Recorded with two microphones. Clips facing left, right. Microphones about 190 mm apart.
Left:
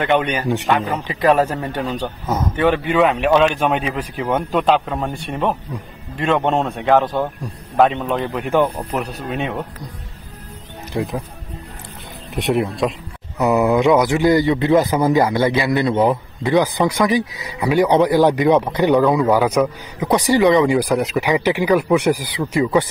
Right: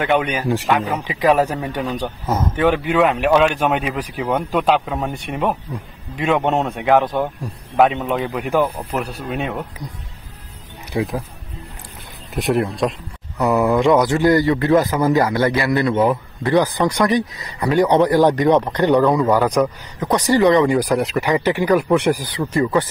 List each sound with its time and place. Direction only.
0.0 s speech: 5° right (ahead or behind)
10.9 s speech: centre (ahead or behind)
12.4 s a man's voice: centre (ahead or behind)
20.6 s a man's voice: centre (ahead or behind)